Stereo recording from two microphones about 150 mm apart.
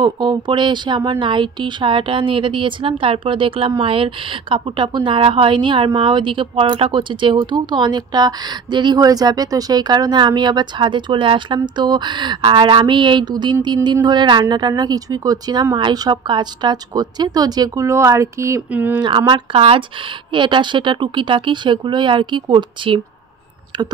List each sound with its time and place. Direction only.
0.0 s a woman's voice: 30° right (ahead or behind)
18.7 s speech: 10° right (ahead or behind)
18.9 s speech: 30° right (ahead or behind)